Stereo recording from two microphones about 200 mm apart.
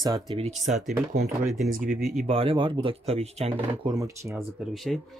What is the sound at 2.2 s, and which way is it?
Speech, 30° right (ahead or behind).